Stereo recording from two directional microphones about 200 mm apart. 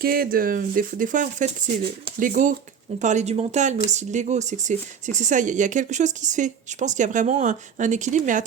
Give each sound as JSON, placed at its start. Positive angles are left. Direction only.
{"t": 0.0, "sound": "speech", "side_deg": -50}